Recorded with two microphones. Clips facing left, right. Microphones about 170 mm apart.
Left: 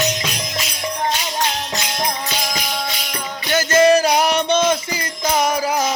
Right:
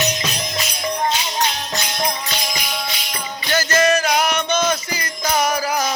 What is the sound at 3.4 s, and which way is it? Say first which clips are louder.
Music: left 4 dB; 20° left (ahead or behind).